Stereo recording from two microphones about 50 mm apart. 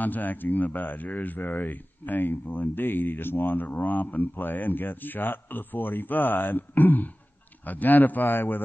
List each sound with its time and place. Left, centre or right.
0.0 s speech: left
3.6 s speech: left